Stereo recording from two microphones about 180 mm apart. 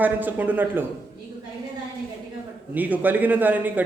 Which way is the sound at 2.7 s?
10° right (ahead or behind).